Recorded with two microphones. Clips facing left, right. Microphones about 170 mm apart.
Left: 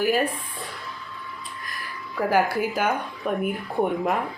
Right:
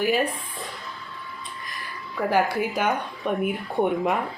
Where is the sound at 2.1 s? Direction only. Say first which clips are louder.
Left 1 dB; centre (ahead or behind).